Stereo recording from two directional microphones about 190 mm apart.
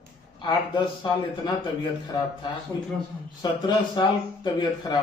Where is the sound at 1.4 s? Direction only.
25° left (ahead or behind).